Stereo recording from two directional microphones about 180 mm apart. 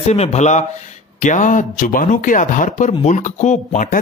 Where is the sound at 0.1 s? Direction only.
35° left (ahead or behind).